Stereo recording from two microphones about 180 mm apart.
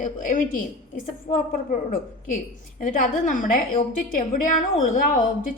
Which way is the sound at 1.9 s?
50° left (ahead or behind).